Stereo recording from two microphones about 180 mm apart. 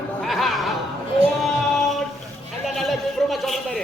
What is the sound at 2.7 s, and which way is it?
Speech, centre (ahead or behind).